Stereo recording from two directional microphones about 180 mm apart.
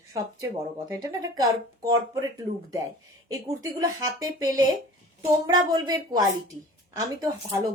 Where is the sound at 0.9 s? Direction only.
20° right (ahead or behind).